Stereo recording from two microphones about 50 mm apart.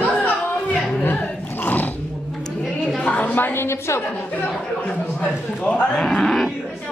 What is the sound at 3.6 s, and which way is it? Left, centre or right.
Speech, left.